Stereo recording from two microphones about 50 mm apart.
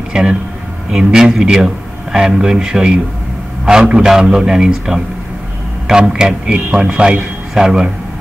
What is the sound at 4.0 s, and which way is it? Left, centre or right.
A man's voice, centre.